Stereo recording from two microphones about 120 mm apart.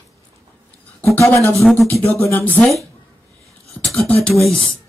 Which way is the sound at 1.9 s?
15° left (ahead or behind).